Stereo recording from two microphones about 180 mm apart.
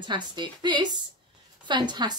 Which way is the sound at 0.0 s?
25° right (ahead or behind).